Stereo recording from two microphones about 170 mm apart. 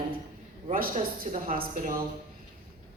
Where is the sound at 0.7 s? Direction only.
55° right (ahead or behind).